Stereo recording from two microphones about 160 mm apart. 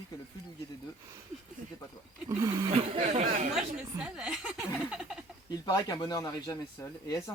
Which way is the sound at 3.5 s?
5° right (ahead or behind).